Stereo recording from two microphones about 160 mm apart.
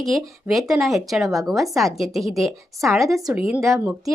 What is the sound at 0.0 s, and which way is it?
A woman's voice, centre (ahead or behind).